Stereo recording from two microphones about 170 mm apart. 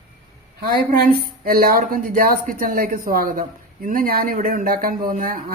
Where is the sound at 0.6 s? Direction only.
70° right (ahead or behind).